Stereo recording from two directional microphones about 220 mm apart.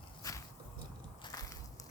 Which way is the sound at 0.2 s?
15° left (ahead or behind).